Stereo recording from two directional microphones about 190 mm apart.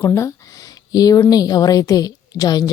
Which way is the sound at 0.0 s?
15° left (ahead or behind).